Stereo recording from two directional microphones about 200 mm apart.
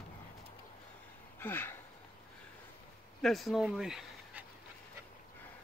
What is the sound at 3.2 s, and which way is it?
Speech, centre (ahead or behind).